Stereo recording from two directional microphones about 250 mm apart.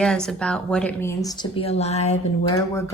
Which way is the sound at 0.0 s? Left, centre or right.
Centre.